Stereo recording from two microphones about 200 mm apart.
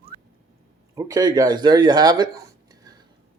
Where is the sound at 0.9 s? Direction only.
15° right (ahead or behind).